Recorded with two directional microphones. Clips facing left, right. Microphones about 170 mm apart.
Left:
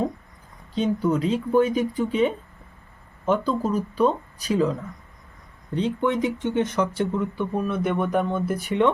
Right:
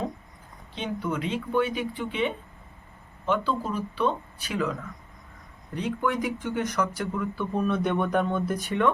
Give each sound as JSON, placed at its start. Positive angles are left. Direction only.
{"t": 0.8, "sound": "speech", "side_deg": 40}
{"t": 7.5, "sound": "speech", "side_deg": 5}